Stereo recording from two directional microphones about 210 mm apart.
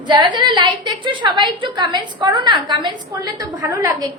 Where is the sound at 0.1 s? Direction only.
20° right (ahead or behind).